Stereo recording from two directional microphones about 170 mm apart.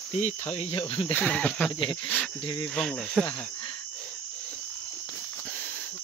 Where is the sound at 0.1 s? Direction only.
40° left (ahead or behind).